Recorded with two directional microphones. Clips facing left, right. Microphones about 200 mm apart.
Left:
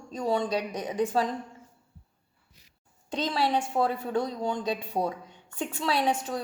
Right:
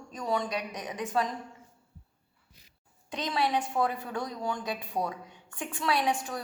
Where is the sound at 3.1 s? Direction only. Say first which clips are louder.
Left 2 dB; 30° left (ahead or behind).